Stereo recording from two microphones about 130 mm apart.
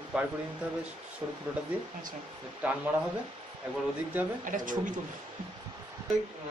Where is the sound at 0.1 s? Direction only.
5° right (ahead or behind).